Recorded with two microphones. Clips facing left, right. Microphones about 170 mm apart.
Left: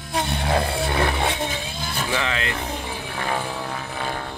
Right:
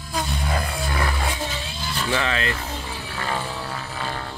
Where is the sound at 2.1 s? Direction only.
15° left (ahead or behind).